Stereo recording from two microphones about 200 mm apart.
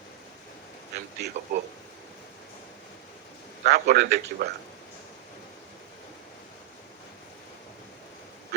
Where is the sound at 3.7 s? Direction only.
55° right (ahead or behind).